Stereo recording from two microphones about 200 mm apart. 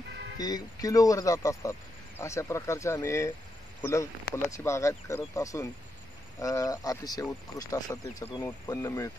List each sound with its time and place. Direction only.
0.4 s speech: 20° left (ahead or behind)